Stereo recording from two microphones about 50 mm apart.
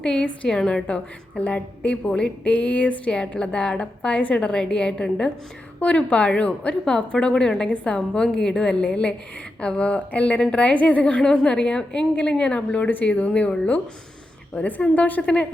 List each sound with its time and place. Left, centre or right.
0.0 s a woman's voice: left
0.9 s a woman's voice: left
3.1 s a woman's voice: centre
4.4 s a woman's voice: centre
11.0 s a woman's voice: centre